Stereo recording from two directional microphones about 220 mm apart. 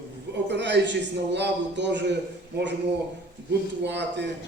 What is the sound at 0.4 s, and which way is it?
A man's voice, 50° right (ahead or behind).